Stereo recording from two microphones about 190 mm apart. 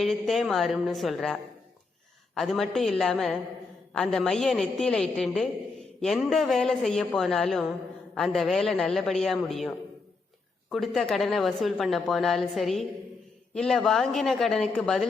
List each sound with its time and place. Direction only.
0.0 s a woman's voice: centre (ahead or behind)